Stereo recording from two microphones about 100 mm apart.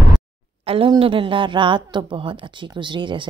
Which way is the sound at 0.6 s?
65° right (ahead or behind).